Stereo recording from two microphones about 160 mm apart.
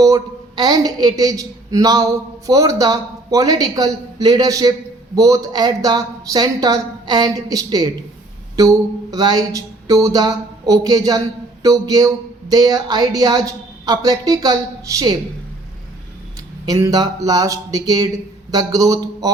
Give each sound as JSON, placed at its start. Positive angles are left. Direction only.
{"t": 0.0, "sound": "speech", "side_deg": -25}
{"t": 16.6, "sound": "speech", "side_deg": -20}